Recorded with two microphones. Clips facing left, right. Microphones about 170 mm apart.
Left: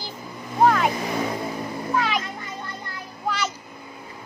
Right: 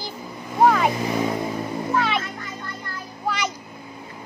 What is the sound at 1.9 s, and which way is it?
Music, 10° left (ahead or behind).